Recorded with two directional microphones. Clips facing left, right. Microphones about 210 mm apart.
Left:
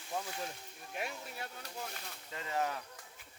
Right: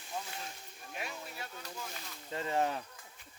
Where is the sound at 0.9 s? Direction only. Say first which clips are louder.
Left 2 dB; 55° left (ahead or behind).